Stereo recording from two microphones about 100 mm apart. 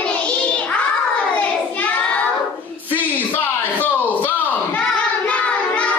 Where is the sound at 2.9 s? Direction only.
20° left (ahead or behind).